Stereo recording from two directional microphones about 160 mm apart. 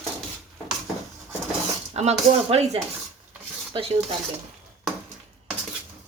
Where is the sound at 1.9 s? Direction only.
40° right (ahead or behind).